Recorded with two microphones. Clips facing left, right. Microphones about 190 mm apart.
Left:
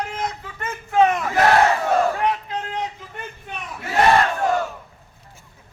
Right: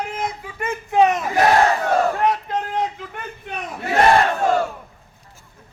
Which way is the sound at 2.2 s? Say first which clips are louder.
Right 3 dB; 45° right (ahead or behind).